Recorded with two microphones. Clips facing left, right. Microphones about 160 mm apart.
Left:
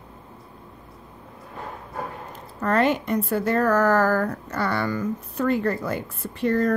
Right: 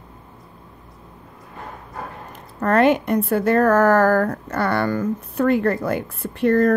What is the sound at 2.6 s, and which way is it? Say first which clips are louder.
A woman's voice: right 5 dB; 55° right (ahead or behind).